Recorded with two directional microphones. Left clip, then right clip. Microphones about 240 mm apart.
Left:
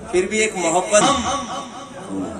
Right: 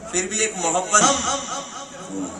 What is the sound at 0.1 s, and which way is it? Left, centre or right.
Speech, right.